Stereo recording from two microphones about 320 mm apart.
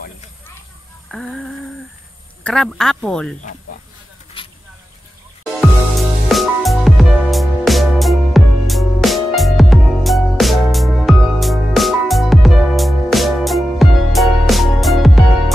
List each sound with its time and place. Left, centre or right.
1.1 s speech: centre
4.4 s vehicle: centre
5.4 s music: centre